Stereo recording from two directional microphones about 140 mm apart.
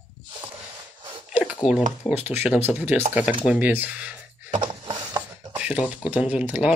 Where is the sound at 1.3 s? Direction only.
5° right (ahead or behind).